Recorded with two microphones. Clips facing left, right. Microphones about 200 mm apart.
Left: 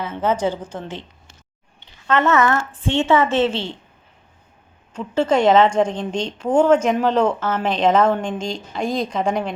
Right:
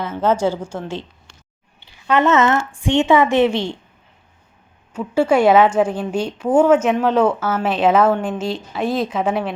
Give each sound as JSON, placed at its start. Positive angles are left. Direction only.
{"t": 0.5, "sound": "speech", "side_deg": -10}
{"t": 2.0, "sound": "speech", "side_deg": -15}
{"t": 4.9, "sound": "speech", "side_deg": -10}